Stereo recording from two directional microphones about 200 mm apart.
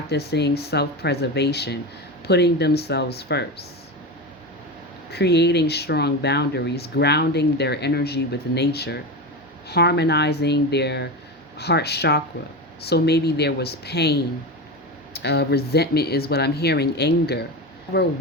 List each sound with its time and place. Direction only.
0.1 s speech: 55° left (ahead or behind)
5.1 s speech: 55° left (ahead or behind)